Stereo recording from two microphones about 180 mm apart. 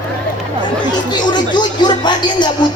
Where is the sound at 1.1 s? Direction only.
25° left (ahead or behind).